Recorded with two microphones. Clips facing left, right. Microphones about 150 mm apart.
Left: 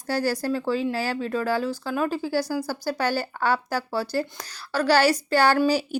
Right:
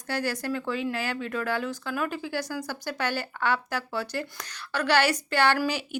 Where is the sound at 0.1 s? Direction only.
35° left (ahead or behind).